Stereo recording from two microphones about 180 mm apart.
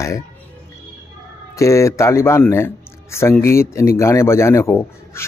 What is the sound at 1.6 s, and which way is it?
A man's voice, 15° left (ahead or behind).